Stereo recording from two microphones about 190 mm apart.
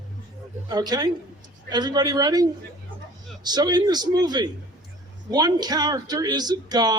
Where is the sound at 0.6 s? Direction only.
20° right (ahead or behind).